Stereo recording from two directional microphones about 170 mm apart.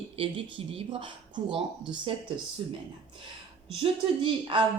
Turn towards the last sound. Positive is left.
turn(degrees=-30)  # may be behind; listen again after turning